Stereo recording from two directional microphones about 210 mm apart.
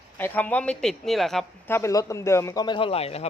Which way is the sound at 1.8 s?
15° left (ahead or behind).